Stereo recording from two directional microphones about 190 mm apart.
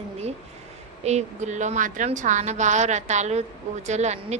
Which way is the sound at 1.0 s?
35° right (ahead or behind).